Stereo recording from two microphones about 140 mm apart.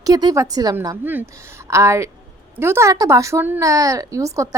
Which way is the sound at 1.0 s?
15° right (ahead or behind).